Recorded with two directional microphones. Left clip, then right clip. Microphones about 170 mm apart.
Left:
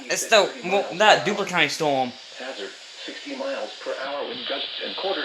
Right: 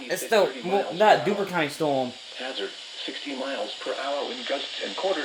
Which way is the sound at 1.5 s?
5° left (ahead or behind).